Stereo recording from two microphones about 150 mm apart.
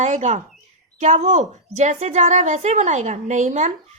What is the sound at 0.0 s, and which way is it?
A woman's voice, 55° right (ahead or behind).